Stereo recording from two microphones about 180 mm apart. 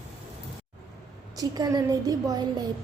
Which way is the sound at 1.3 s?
20° right (ahead or behind).